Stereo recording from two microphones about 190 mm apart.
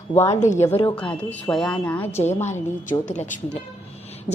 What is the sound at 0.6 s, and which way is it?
A woman's voice, 15° left (ahead or behind).